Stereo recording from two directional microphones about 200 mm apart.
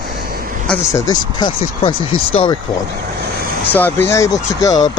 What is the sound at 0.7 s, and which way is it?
Speech, 15° left (ahead or behind).